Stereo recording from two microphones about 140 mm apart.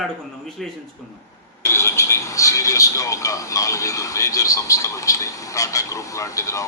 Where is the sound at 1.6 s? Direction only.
20° left (ahead or behind).